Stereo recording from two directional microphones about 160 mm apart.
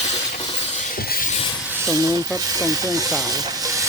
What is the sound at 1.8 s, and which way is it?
Speech, 15° right (ahead or behind).